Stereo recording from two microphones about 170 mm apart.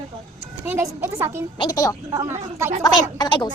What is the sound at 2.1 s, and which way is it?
Speech, 15° right (ahead or behind).